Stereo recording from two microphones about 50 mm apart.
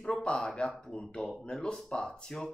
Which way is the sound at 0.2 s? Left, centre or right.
Left.